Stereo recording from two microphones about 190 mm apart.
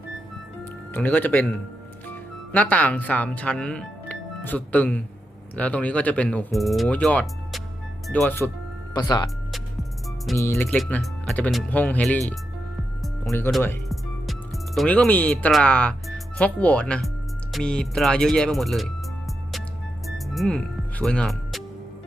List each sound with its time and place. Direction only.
0.6 s speech: 10° left (ahead or behind)
8.9 s speech: 20° left (ahead or behind)
10.3 s speech: 15° left (ahead or behind)
13.3 s speech: centre (ahead or behind)
20.1 s music: centre (ahead or behind)